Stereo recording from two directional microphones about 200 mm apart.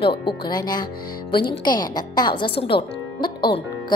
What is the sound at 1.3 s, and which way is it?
A woman's voice, 25° left (ahead or behind).